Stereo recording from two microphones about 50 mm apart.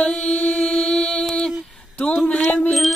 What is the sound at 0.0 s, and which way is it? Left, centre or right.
Mantra, centre.